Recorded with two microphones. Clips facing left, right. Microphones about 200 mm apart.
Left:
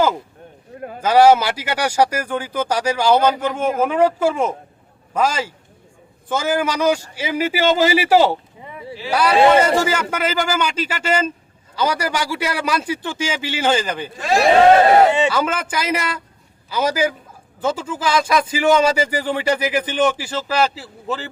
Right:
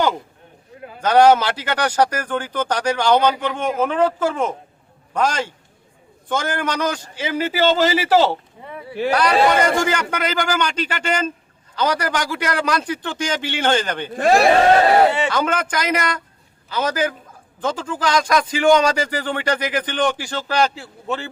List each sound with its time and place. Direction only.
0.9 s speech: 5° left (ahead or behind)
14.1 s speech: 55° right (ahead or behind)
15.3 s speech: 5° left (ahead or behind)